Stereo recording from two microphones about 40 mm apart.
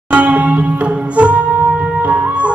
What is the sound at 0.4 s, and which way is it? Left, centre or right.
Music, right.